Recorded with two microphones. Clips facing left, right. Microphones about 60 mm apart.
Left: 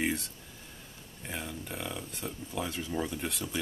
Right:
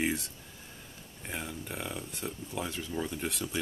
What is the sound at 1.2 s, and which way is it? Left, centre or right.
Speech, centre.